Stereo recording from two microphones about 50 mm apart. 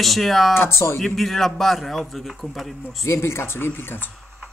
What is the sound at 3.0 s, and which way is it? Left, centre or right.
Speech, left.